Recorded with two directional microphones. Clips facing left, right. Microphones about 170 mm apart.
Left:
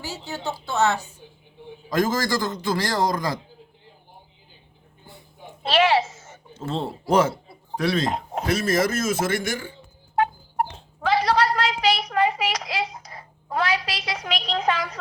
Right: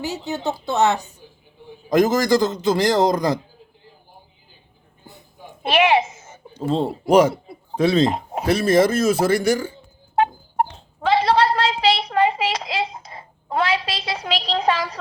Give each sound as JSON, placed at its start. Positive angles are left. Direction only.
{"t": 0.0, "sound": "a man's voice", "side_deg": -20}
{"t": 5.6, "sound": "a woman's voice", "side_deg": -15}
{"t": 11.0, "sound": "a sound", "side_deg": -25}